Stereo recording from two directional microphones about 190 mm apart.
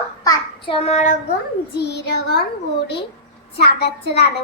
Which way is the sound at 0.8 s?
35° left (ahead or behind).